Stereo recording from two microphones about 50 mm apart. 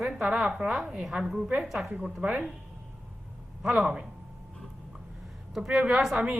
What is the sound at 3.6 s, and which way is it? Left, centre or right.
Speech, centre.